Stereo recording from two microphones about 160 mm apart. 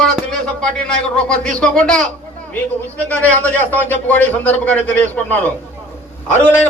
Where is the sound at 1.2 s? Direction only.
5° left (ahead or behind).